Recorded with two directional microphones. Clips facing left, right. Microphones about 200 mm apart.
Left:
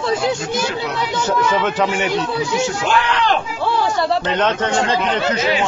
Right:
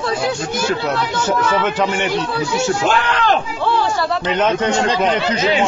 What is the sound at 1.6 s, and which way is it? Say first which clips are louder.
Speech: even; centre (ahead or behind).